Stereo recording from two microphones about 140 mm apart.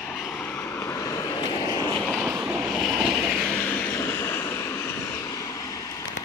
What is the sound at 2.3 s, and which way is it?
Vehicle, 10° right (ahead or behind).